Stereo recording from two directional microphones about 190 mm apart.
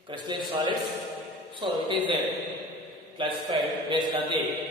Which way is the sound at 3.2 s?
25° right (ahead or behind).